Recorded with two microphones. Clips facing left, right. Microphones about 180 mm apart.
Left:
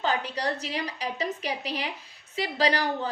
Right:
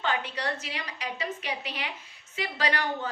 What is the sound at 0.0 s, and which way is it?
A woman's voice, 35° left (ahead or behind).